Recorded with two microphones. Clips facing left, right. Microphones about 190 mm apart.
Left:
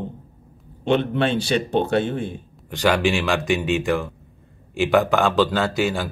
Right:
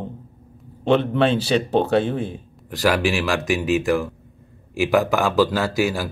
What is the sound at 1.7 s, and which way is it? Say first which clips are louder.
A man's voice: right 2 dB; 5° right (ahead or behind).